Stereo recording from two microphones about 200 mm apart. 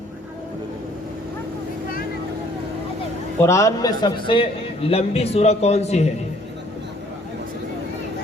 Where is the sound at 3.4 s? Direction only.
15° left (ahead or behind); by 6.0 s 35° left (ahead or behind).